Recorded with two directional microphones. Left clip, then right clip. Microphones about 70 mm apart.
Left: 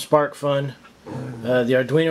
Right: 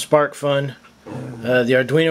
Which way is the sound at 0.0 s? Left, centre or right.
Right.